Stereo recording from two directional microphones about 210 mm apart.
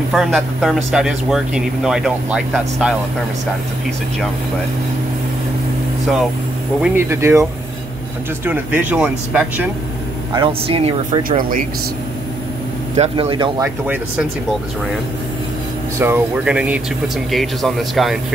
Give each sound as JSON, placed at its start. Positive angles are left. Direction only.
{"t": 0.1, "sound": "speech", "side_deg": 0}
{"t": 6.8, "sound": "speech", "side_deg": -10}
{"t": 8.5, "sound": "speech", "side_deg": -10}
{"t": 10.3, "sound": "speech", "side_deg": -25}
{"t": 11.2, "sound": "speech", "side_deg": -40}
{"t": 12.9, "sound": "speech", "side_deg": -30}
{"t": 16.0, "sound": "speech", "side_deg": -10}